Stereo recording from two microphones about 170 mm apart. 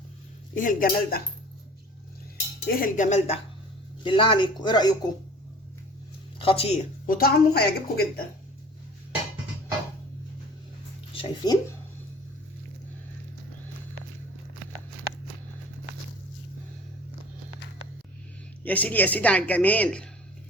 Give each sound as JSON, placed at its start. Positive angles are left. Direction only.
{"t": 0.5, "sound": "speech", "side_deg": 50}
{"t": 2.6, "sound": "speech", "side_deg": 50}
{"t": 6.4, "sound": "speech", "side_deg": 35}
{"t": 7.1, "sound": "a woman's voice", "side_deg": 65}
{"t": 11.1, "sound": "speech", "side_deg": 30}
{"t": 18.6, "sound": "a woman's voice", "side_deg": 10}